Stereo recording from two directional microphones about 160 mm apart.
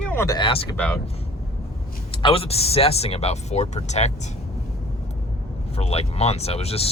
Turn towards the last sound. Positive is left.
turn(degrees=40)  # may be behind; listen again after turning